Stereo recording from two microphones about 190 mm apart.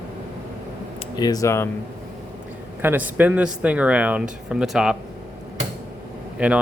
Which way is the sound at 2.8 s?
10° right (ahead or behind).